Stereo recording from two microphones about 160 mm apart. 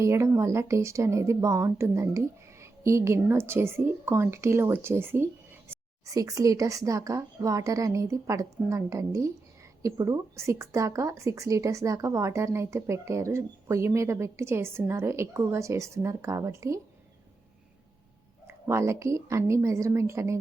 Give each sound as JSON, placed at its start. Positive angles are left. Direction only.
{"t": 0.0, "sound": "speech", "side_deg": -20}
{"t": 18.4, "sound": "speech", "side_deg": -15}